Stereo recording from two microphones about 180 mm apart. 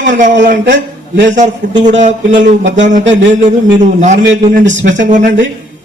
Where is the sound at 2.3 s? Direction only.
90° right.